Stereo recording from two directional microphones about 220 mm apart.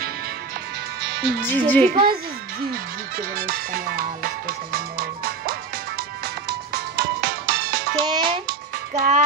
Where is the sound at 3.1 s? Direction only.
40° right (ahead or behind).